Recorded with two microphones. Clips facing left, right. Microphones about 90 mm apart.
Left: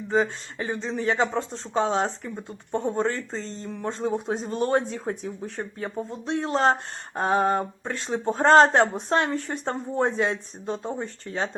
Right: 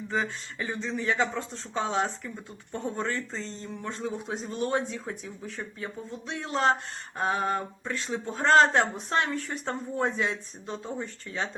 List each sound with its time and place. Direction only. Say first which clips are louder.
0.1 s speech: left 7 dB; 35° left (ahead or behind)